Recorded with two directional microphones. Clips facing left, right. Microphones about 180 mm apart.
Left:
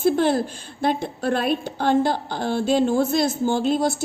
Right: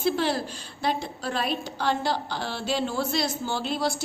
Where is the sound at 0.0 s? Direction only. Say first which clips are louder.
Left 6 dB; 50° left (ahead or behind).